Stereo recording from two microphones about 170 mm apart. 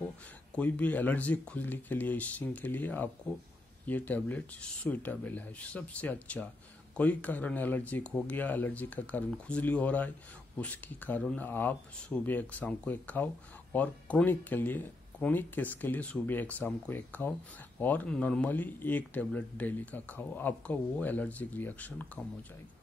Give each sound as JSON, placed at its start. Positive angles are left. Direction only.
{"t": 0.6, "sound": "speech", "side_deg": 10}